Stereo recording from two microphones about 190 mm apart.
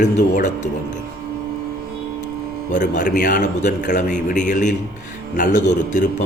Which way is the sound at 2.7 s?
40° left (ahead or behind).